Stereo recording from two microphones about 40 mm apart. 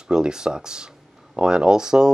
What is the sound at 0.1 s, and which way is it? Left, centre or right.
Speech, centre.